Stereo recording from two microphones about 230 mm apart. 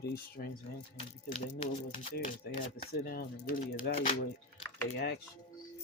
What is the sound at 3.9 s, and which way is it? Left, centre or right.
Speech, left.